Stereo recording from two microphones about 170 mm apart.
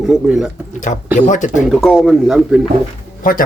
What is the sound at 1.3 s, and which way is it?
Speech, 45° left (ahead or behind).